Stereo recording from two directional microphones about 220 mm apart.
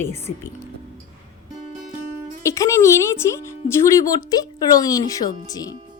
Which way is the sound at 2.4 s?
15° left (ahead or behind).